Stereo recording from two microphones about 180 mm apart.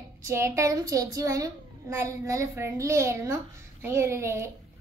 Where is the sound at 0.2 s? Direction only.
15° right (ahead or behind).